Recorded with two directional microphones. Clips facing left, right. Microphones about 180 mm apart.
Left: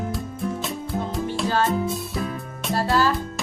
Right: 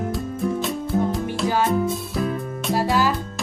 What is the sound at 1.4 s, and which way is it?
Speech, 15° right (ahead or behind).